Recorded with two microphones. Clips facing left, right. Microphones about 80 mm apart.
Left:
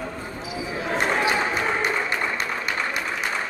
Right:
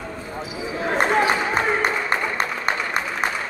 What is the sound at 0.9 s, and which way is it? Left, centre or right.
Music, right.